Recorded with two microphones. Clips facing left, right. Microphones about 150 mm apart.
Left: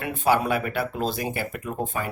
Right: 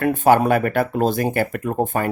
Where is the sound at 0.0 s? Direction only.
50° right (ahead or behind).